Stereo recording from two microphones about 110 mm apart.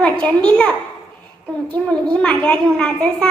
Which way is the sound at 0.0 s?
10° left (ahead or behind).